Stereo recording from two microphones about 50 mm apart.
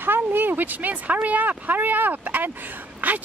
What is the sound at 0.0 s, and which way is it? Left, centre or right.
A woman's voice, right.